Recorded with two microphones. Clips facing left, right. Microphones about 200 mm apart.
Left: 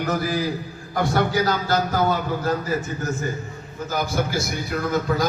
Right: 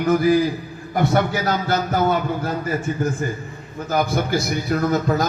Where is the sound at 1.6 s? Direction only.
60° right (ahead or behind).